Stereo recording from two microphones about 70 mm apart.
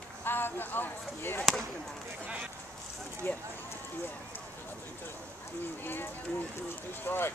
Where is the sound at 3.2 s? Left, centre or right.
Left.